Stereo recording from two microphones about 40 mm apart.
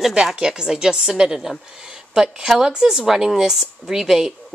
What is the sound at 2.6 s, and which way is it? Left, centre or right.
Speech, centre.